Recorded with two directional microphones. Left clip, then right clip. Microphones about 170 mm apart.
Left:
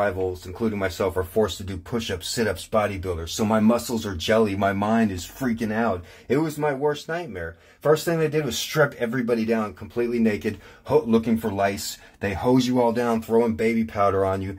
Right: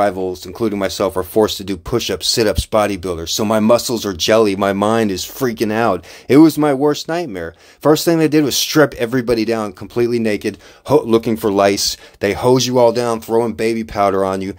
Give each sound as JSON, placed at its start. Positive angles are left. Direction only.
{"t": 0.0, "sound": "speech", "side_deg": -40}
{"t": 11.1, "sound": "speech", "side_deg": -45}